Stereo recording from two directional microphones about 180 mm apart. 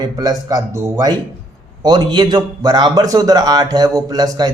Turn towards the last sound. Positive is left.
turn(degrees=-20)  # may be behind; listen again after turning